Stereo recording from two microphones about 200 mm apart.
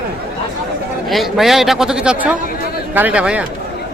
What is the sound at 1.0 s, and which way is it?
A man's voice, centre (ahead or behind).